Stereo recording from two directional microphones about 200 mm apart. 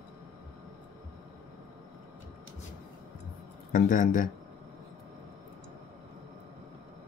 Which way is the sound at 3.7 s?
40° left (ahead or behind).